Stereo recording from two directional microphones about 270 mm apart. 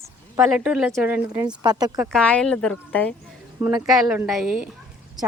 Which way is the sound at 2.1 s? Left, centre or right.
Centre.